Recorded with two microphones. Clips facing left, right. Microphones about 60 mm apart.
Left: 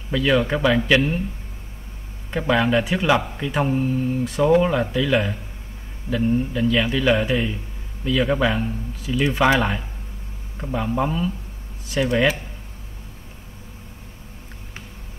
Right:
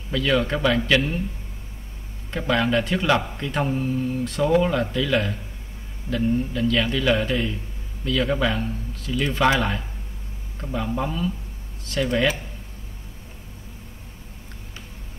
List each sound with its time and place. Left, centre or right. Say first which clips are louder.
0.1 s speech: left 2 dB; centre
2.3 s speech: left 2 dB; centre
3.7 s speech: left 3 dB; left
4.2 s speech: left 3 dB; centre
6.7 s speech: left 2 dB; centre